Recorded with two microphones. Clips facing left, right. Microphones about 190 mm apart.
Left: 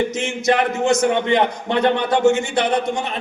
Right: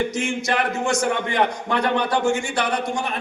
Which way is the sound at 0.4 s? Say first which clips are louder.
Left 9 dB; 20° left (ahead or behind).